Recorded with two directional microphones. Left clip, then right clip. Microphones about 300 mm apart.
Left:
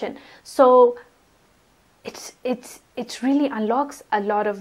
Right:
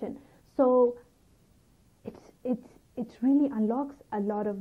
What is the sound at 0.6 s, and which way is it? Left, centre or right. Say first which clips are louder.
Speech: left 9 dB; left.